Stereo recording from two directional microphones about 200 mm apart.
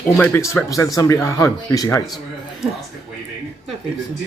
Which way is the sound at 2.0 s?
Centre (ahead or behind).